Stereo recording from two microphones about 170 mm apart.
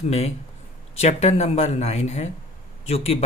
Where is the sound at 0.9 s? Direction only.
40° left (ahead or behind).